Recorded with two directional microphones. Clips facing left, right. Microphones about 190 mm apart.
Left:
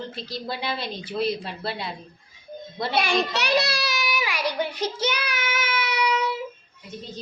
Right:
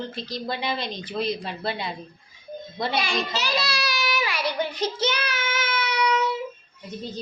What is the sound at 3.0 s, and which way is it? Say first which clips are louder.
Speech: left 3 dB; 60° left (ahead or behind).